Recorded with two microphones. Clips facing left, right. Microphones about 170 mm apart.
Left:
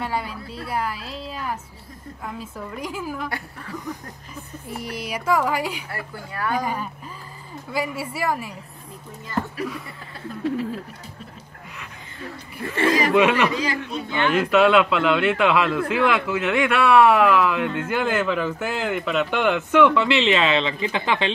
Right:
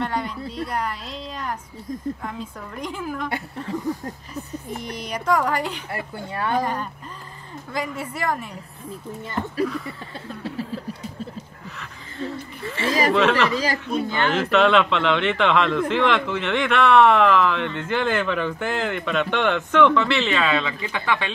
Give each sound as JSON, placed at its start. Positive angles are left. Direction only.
{"t": 0.0, "sound": "a sound", "side_deg": 5}
{"t": 2.2, "sound": "speech", "side_deg": 5}
{"t": 3.3, "sound": "speech", "side_deg": -25}
{"t": 4.6, "sound": "speech", "side_deg": 5}
{"t": 5.9, "sound": "speech", "side_deg": -25}
{"t": 6.6, "sound": "speech", "side_deg": 5}
{"t": 12.8, "sound": "speech", "side_deg": 55}
{"t": 13.1, "sound": "speech", "side_deg": 10}
{"t": 13.6, "sound": "a man's voice", "side_deg": -45}
{"t": 14.3, "sound": "speech", "side_deg": 5}